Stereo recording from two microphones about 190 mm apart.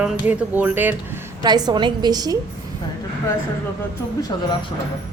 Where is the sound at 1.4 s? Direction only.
20° right (ahead or behind).